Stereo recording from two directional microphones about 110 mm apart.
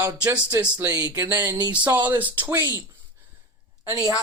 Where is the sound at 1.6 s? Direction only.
40° right (ahead or behind).